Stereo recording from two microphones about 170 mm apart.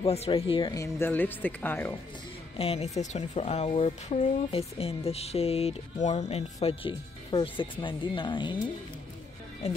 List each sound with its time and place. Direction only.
0.0 s speech: 35° left (ahead or behind)
0.7 s a woman's voice: 15° left (ahead or behind)
2.5 s speech: 35° left (ahead or behind)
9.6 s speech: 40° left (ahead or behind)